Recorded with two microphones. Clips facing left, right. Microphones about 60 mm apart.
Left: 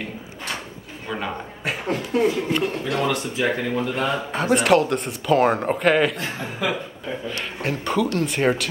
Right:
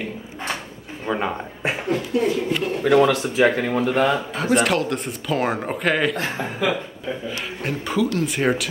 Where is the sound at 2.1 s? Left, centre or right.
Left.